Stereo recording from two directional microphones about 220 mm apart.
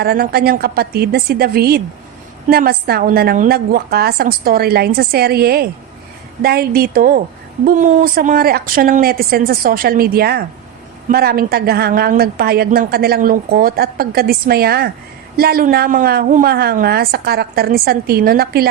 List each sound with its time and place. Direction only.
0.0 s a woman's voice: 45° right (ahead or behind)